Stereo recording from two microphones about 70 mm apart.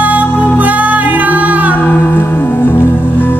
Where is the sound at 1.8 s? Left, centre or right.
Left.